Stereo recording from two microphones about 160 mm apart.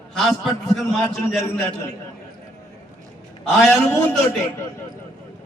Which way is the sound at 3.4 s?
5° left (ahead or behind).